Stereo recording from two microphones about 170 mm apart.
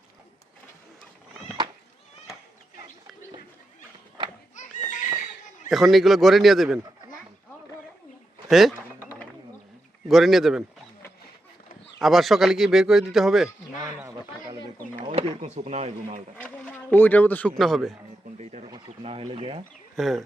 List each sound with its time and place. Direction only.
4.5 s a sound: 45° left (ahead or behind)
5.6 s speech: centre (ahead or behind)
8.4 s speech: centre (ahead or behind)
10.1 s speech: centre (ahead or behind)
11.9 s speech: centre (ahead or behind)
14.0 s a sound: 20° right (ahead or behind)
15.1 s speech: 45° right (ahead or behind)
16.4 s speech: 5° left (ahead or behind)
18.3 s a sound: 40° right (ahead or behind)
18.9 s speech: 35° right (ahead or behind)
20.0 s speech: centre (ahead or behind)